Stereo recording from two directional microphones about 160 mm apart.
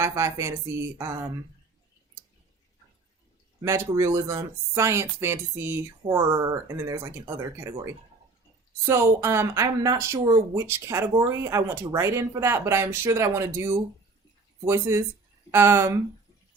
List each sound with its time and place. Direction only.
0.0 s speech: 20° right (ahead or behind)
3.6 s speech: 20° right (ahead or behind)